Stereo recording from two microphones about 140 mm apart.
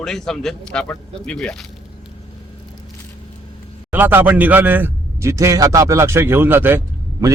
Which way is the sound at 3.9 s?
15° right (ahead or behind).